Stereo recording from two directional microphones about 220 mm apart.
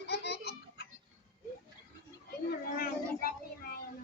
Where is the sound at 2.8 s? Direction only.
45° left (ahead or behind).